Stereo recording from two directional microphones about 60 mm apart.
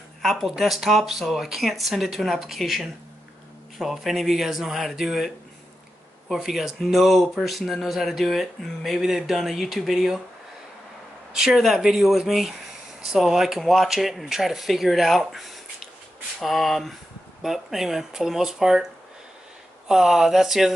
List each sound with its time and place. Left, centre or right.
0.2 s speech: centre
11.3 s speech: centre
19.9 s speech: centre